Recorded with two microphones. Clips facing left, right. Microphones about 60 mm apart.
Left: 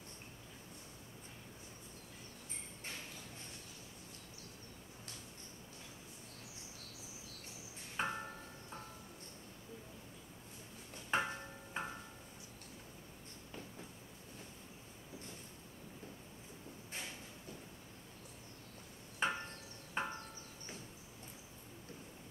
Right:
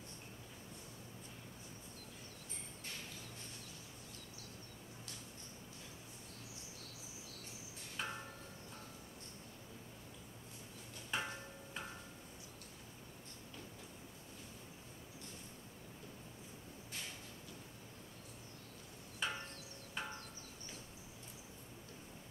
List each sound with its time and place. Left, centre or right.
8.0 s tubular bells: left
11.2 s music: left
19.1 s a sound: left